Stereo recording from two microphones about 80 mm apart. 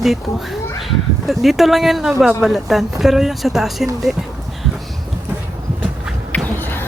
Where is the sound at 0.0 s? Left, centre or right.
Centre.